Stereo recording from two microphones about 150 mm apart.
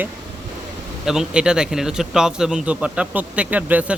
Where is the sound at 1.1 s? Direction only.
5° right (ahead or behind).